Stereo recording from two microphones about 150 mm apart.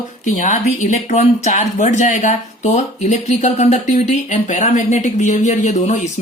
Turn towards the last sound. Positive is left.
turn(degrees=50)  # may be behind; listen again after turning